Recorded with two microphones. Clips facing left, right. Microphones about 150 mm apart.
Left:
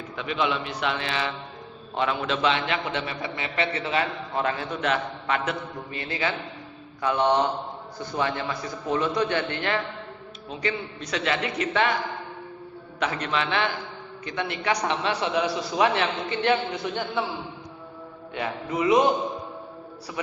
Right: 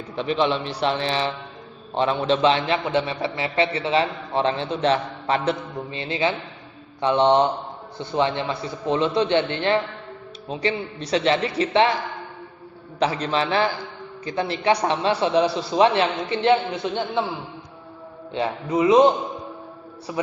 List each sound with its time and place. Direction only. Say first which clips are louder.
0.2 s a man's voice: right 5 dB; 30° right (ahead or behind)
13.0 s a man's voice: right 5 dB; 30° right (ahead or behind)
18.3 s a man's voice: right 5 dB; 25° right (ahead or behind)
20.1 s a man's voice: right 6 dB; 20° right (ahead or behind)